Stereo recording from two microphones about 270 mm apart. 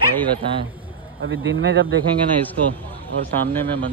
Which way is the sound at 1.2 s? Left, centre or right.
Right.